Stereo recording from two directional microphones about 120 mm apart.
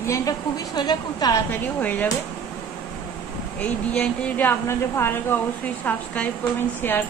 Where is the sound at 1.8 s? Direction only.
15° left (ahead or behind).